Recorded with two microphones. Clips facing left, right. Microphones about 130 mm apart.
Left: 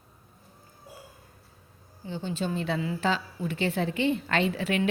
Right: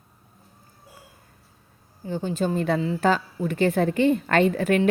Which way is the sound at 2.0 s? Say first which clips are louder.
Right 6 dB; 45° right (ahead or behind).